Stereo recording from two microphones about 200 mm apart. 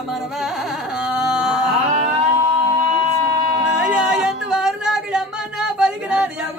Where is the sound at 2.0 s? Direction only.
35° right (ahead or behind).